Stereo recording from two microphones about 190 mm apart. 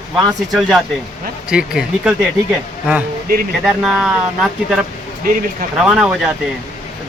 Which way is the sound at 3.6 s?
5° right (ahead or behind).